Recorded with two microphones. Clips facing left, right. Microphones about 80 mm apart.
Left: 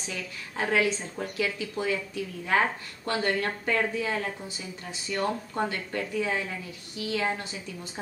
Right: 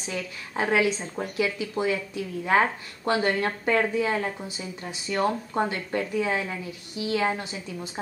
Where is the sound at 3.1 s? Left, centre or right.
Centre.